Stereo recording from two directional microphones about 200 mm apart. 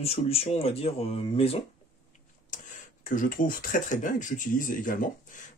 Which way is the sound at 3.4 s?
40° left (ahead or behind).